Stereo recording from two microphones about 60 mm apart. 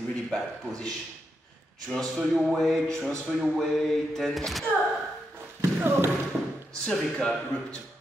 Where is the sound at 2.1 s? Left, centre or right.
Centre.